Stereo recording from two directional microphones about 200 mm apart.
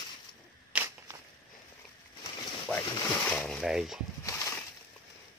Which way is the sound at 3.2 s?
5° left (ahead or behind).